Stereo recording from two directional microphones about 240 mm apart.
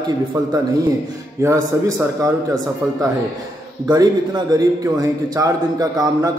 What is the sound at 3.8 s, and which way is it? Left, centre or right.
A man's voice, centre.